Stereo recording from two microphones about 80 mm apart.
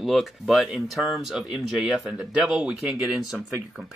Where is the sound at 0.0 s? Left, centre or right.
Centre.